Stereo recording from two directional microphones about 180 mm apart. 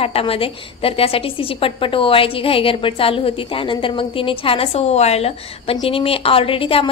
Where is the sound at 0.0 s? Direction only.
30° left (ahead or behind).